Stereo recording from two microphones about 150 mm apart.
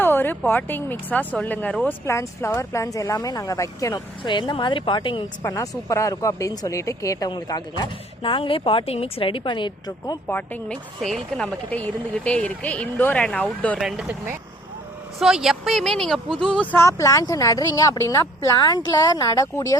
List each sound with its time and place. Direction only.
0.0 s speech: 15° left (ahead or behind); by 5.2 s 30° left (ahead or behind)
5.4 s a woman's voice: 20° left (ahead or behind)
10.2 s speech: 10° left (ahead or behind)
13.7 s speech: 5° right (ahead or behind)
15.2 s speech: centre (ahead or behind)
16.7 s a woman's voice: 20° left (ahead or behind)